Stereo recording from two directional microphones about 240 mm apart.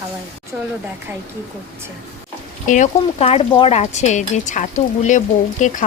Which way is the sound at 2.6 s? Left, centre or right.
Left.